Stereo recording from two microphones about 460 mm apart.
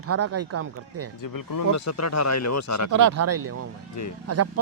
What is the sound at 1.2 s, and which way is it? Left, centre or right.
Speech, left.